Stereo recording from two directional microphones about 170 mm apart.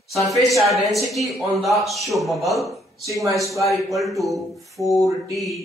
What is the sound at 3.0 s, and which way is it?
Speech, 20° right (ahead or behind).